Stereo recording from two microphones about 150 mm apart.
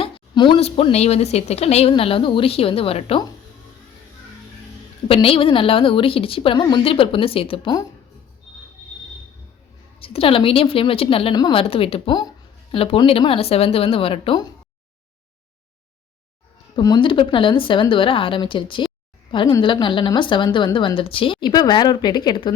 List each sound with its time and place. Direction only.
0.0 s a woman's voice: 35° left (ahead or behind)
5.0 s a woman's voice: 40° left (ahead or behind)
10.0 s a woman's voice: 40° left (ahead or behind)
16.7 s a woman's voice: 30° left (ahead or behind)